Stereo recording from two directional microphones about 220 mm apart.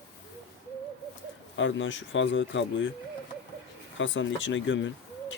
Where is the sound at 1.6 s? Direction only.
60° left (ahead or behind).